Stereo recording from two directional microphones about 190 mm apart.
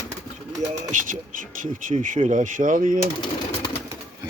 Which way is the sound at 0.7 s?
40° right (ahead or behind).